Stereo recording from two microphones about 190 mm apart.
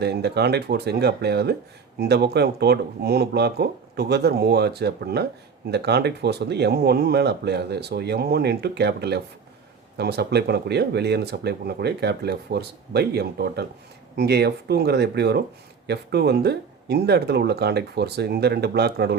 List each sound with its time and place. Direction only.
0.0 s speech: 60° right (ahead or behind)